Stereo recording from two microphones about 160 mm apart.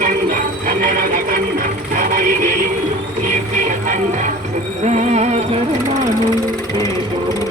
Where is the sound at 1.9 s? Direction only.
60° right (ahead or behind).